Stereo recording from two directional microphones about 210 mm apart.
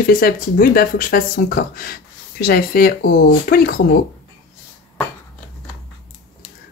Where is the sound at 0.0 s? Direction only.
45° left (ahead or behind).